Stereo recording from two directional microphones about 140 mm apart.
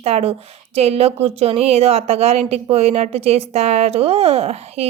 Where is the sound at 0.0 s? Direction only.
45° right (ahead or behind).